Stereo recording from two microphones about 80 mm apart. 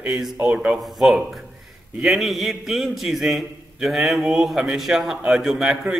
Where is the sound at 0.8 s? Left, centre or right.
Centre.